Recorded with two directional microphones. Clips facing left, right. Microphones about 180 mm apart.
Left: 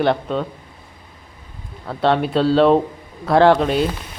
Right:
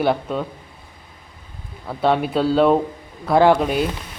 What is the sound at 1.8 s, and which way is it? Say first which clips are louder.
Speech: left 1 dB; 5° right (ahead or behind).